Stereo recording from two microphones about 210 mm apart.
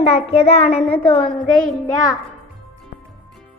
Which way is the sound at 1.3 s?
5° left (ahead or behind).